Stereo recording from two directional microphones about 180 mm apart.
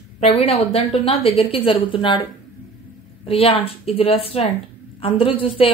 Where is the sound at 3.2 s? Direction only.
30° left (ahead or behind).